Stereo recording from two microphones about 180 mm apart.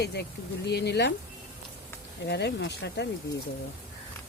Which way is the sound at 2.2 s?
65° left (ahead or behind).